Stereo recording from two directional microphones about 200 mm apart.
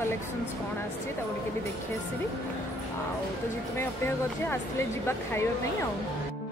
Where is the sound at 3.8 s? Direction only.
10° left (ahead or behind).